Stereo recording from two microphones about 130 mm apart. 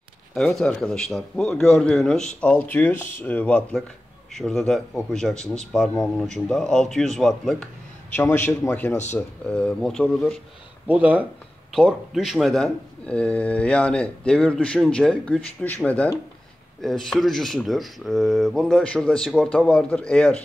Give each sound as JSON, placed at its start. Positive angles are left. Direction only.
{"t": 0.3, "sound": "a man's voice", "side_deg": 5}
{"t": 8.2, "sound": "speech", "side_deg": 15}
{"t": 9.5, "sound": "a man's voice", "side_deg": 10}
{"t": 10.9, "sound": "a man's voice", "side_deg": -10}